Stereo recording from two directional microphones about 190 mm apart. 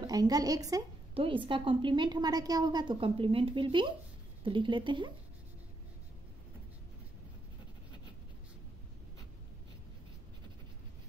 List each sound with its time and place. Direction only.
0.0 s a woman's voice: 20° right (ahead or behind)